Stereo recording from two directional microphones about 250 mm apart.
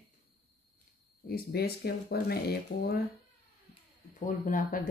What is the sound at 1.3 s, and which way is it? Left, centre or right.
Speech, left.